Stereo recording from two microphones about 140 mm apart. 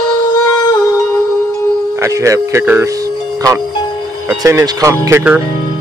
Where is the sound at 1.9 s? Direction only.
20° right (ahead or behind).